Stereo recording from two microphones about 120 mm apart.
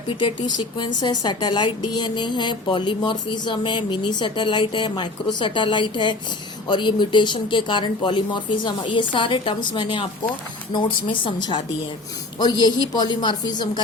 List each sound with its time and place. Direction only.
0.2 s a woman's voice: 40° left (ahead or behind)